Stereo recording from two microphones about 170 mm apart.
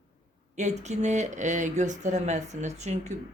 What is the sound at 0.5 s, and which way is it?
Speech, 40° right (ahead or behind).